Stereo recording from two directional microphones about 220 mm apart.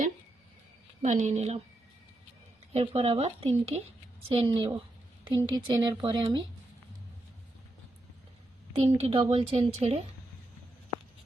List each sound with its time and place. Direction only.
1.0 s a woman's voice: 30° right (ahead or behind)
2.7 s a woman's voice: 25° right (ahead or behind)
8.7 s a woman's voice: 25° right (ahead or behind)